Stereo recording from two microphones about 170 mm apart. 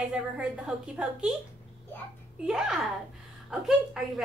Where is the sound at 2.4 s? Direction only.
5° right (ahead or behind).